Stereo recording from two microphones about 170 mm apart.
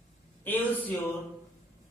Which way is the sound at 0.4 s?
10° left (ahead or behind).